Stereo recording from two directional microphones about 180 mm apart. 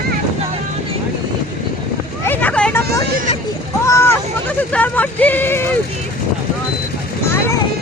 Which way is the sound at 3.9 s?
15° left (ahead or behind).